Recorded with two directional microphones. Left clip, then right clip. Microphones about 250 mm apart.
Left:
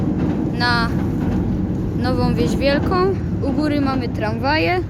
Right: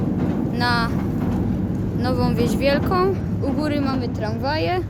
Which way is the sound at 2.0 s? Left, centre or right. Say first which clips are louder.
Left 2 dB; centre.